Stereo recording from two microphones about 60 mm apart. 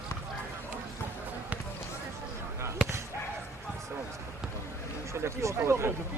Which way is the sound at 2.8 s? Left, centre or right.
Centre.